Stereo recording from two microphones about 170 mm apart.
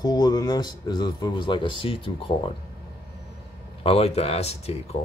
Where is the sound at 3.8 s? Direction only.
35° left (ahead or behind).